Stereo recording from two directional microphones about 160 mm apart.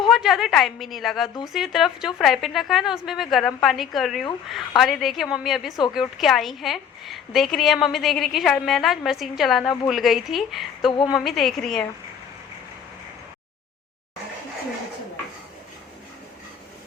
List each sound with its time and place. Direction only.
0.1 s a woman's voice: centre (ahead or behind)